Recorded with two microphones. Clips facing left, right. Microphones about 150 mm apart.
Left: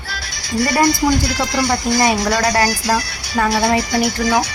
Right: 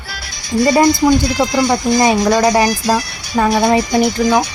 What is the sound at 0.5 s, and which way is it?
Speech, 20° right (ahead or behind).